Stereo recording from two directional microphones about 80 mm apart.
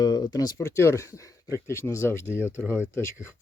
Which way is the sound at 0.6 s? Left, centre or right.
Left.